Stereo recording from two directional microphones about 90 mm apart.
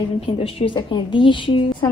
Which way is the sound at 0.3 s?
90° left.